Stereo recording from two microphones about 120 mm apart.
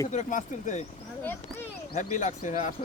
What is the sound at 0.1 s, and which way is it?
Speech, 90° left.